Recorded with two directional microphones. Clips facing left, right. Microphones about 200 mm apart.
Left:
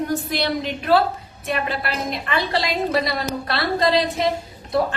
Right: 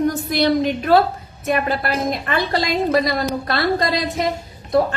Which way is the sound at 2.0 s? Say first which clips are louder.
Right 3 dB; 45° right (ahead or behind).